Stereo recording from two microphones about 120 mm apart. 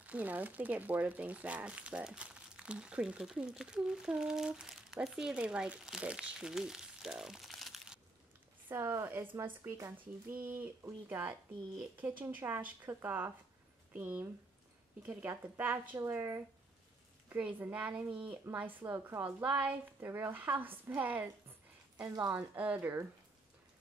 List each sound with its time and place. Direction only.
0.0 s speech: 10° right (ahead or behind)
8.6 s a woman's voice: 20° right (ahead or behind)
22.0 s a woman's voice: 30° right (ahead or behind)
22.3 s speech: 15° right (ahead or behind)